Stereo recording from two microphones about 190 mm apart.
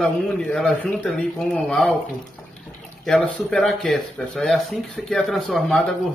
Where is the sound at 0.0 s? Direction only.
5° left (ahead or behind).